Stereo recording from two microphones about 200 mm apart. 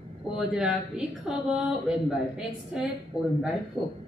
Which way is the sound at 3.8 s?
20° left (ahead or behind).